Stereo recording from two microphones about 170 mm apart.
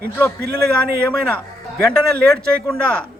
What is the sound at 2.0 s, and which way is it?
Speech, 5° left (ahead or behind).